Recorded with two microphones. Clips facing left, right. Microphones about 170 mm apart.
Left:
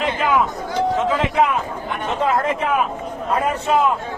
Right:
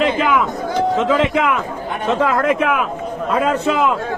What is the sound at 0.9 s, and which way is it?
A man's voice, 90° right.